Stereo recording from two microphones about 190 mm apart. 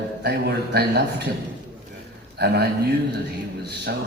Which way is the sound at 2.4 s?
60° right (ahead or behind).